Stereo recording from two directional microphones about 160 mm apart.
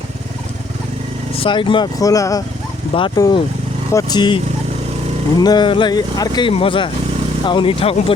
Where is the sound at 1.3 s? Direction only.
35° left (ahead or behind).